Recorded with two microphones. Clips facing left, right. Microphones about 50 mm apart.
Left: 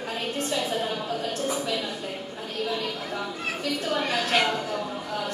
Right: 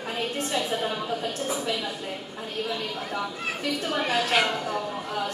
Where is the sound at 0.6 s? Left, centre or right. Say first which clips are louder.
Even; centre.